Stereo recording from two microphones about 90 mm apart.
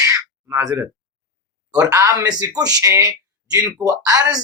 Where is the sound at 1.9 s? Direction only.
40° right (ahead or behind).